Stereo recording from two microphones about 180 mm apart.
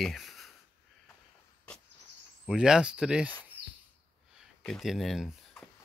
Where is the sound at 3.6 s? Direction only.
65° right (ahead or behind).